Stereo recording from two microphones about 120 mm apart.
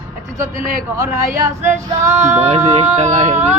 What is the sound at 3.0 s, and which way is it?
Speech, 75° right (ahead or behind).